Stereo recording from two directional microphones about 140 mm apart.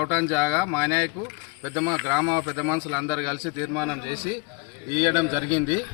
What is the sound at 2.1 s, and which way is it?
A man's voice, 30° right (ahead or behind).